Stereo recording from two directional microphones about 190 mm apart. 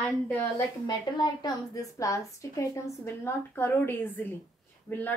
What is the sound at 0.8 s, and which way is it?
A woman's voice, 20° left (ahead or behind).